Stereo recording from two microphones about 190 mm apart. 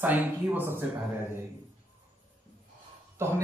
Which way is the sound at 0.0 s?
10° right (ahead or behind).